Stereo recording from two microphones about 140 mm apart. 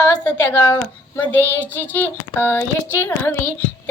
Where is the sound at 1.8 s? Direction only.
15° left (ahead or behind).